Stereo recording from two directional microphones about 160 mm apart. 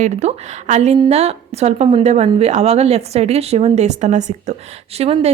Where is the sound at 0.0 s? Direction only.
45° right (ahead or behind).